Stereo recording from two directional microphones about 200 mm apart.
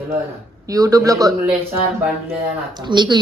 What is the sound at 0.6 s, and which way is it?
Speech, 15° right (ahead or behind).